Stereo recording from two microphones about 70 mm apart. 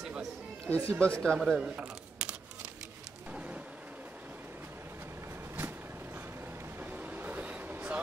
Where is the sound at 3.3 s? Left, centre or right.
Centre.